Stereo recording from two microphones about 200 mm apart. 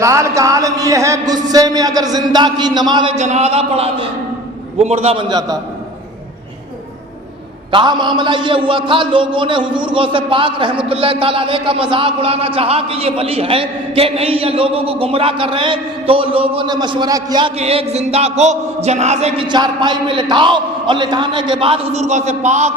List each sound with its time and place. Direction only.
0.0 s a man's voice: 15° right (ahead or behind)
3.2 s a man's voice: 35° right (ahead or behind)
7.7 s a man's voice: 25° right (ahead or behind)
17.6 s a man's voice: 30° right (ahead or behind)